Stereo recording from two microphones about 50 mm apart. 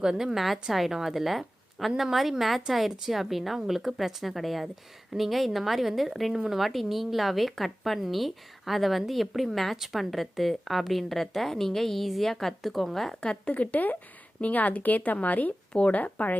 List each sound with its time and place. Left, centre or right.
0.0 s a woman's voice: centre
13.2 s a woman's voice: centre
13.5 s a woman's voice: left
15.7 s speech: left
16.0 s a woman's voice: left